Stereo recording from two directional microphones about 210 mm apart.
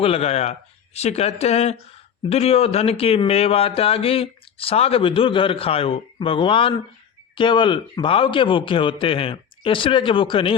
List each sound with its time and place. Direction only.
0.0 s speech: 30° left (ahead or behind)